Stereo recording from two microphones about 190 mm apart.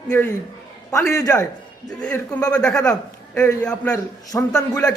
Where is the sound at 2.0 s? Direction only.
5° left (ahead or behind).